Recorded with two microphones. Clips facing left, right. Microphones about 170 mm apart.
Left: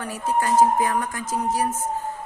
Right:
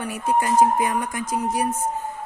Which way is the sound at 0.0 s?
15° right (ahead or behind).